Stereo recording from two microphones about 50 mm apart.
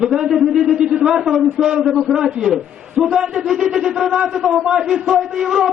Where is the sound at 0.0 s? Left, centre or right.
Centre.